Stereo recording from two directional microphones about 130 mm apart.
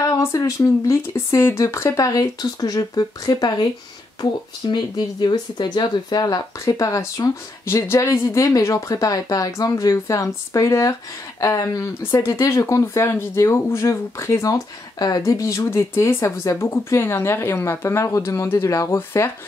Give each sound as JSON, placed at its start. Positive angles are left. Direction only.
{"t": 0.0, "sound": "speech", "side_deg": 25}